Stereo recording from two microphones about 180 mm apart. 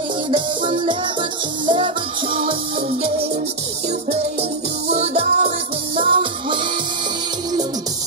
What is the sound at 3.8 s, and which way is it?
Music, 35° right (ahead or behind).